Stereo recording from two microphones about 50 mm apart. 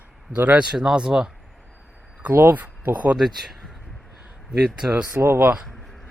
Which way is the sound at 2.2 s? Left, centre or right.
Right.